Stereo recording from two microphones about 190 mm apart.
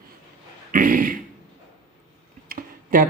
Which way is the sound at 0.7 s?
45° right (ahead or behind).